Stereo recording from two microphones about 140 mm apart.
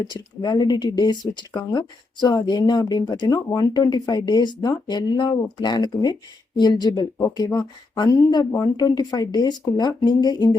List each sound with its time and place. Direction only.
0.0 s speech: 30° left (ahead or behind)